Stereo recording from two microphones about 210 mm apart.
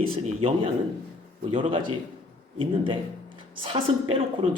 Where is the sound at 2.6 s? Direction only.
25° right (ahead or behind).